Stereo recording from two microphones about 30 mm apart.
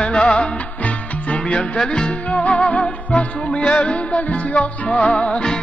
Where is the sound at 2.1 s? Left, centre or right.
Left.